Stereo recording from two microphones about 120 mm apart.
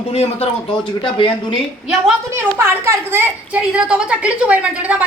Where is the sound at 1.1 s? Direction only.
45° left (ahead or behind).